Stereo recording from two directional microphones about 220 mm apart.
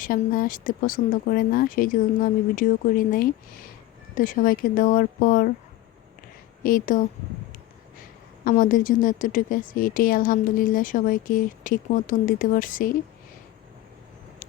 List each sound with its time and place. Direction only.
0.0 s a woman's voice: 40° left (ahead or behind)
6.6 s a woman's voice: 40° left (ahead or behind)
8.4 s a woman's voice: 40° left (ahead or behind)